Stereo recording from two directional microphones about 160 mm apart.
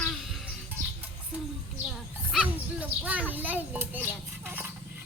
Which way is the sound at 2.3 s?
Centre (ahead or behind).